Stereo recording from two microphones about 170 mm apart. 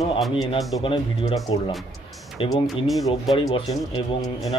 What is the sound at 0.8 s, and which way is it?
Speech, 30° left (ahead or behind).